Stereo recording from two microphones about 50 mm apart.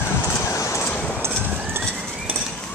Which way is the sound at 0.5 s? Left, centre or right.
Left.